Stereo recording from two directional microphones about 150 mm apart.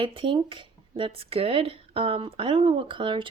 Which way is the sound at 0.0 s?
35° right (ahead or behind).